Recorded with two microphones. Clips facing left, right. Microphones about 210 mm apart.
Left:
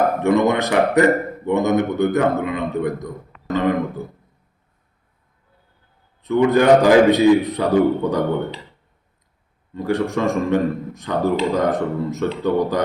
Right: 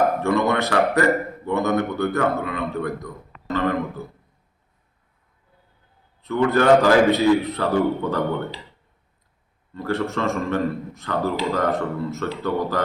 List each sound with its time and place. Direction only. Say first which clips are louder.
0.2 s speech: left 4 dB; 20° left (ahead or behind)
6.2 s a man's voice: left 3 dB; 15° left (ahead or behind)
9.7 s a man's voice: left 4 dB; 15° left (ahead or behind)